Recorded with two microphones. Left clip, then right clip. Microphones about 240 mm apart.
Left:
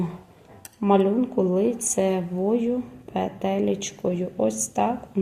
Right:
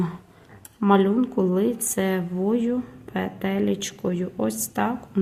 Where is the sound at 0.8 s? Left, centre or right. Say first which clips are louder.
Even; right.